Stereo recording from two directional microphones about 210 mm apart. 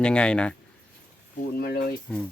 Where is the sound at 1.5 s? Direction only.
45° left (ahead or behind).